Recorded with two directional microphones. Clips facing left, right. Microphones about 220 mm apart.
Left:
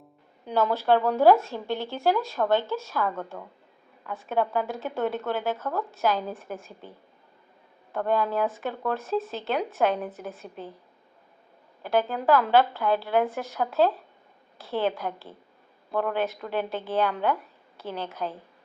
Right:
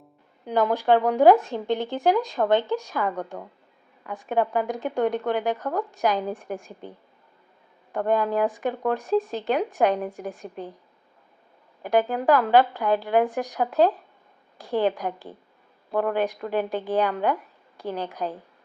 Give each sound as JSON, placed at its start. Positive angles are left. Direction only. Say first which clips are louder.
{"t": 0.4, "sound": "speech", "louder": "right 2 dB", "side_deg": -15}
{"t": 7.9, "sound": "speech", "louder": "right 2 dB", "side_deg": -15}
{"t": 11.8, "sound": "speech", "louder": "right 3 dB", "side_deg": -15}